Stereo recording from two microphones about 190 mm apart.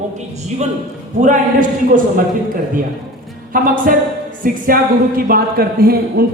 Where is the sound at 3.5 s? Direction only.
50° right (ahead or behind).